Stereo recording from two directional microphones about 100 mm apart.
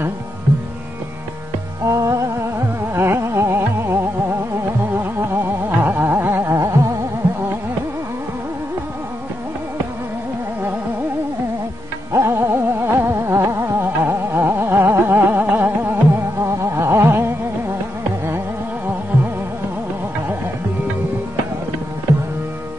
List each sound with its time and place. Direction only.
1.9 s music: 35° right (ahead or behind)
4.9 s a sound: 20° right (ahead or behind)
12.1 s music: 25° right (ahead or behind)